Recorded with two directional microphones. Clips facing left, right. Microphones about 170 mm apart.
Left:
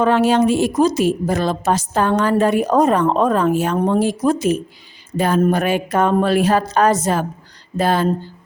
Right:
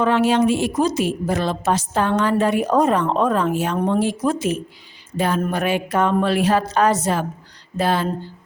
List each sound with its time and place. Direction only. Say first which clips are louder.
0.0 s a woman's voice: left 2 dB; 40° left (ahead or behind)